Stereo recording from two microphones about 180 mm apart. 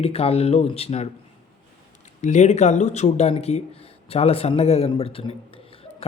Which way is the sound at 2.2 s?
40° left (ahead or behind).